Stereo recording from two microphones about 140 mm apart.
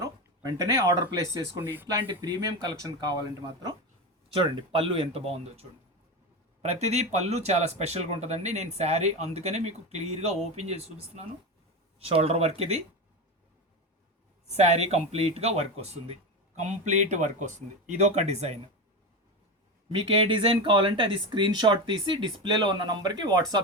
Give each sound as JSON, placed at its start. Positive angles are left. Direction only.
{"t": 0.0, "sound": "speech", "side_deg": -25}
{"t": 1.9, "sound": "speech", "side_deg": -30}
{"t": 4.3, "sound": "speech", "side_deg": -40}
{"t": 14.5, "sound": "speech", "side_deg": -50}
{"t": 19.9, "sound": "speech", "side_deg": -40}